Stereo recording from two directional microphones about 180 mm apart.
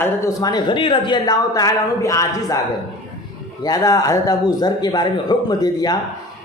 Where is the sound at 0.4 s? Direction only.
25° left (ahead or behind).